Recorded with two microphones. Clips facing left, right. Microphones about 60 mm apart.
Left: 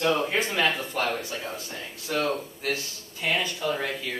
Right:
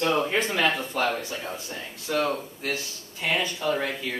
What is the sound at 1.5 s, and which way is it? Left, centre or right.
Speech, centre.